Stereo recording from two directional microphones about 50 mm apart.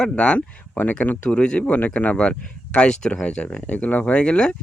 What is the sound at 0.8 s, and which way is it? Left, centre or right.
Speech, left.